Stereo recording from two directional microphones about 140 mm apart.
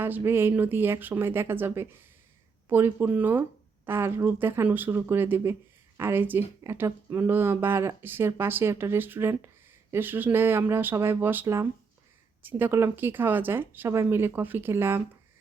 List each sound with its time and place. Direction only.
0.0 s speech: 15° right (ahead or behind)